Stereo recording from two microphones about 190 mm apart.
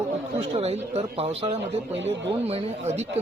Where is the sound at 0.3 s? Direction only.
35° right (ahead or behind).